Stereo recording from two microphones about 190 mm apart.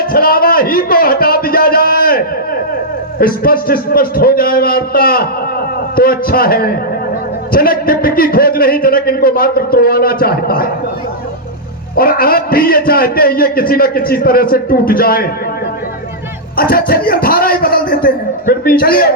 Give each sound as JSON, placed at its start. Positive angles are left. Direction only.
{"t": 0.1, "sound": "a man's voice", "side_deg": 50}
{"t": 11.9, "sound": "a man's voice", "side_deg": 50}
{"t": 16.6, "sound": "a man's voice", "side_deg": 50}